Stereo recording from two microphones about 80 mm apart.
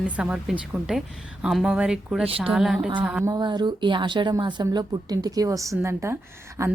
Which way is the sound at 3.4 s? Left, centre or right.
Right.